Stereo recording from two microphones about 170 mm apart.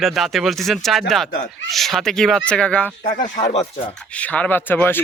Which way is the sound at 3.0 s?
50° left (ahead or behind).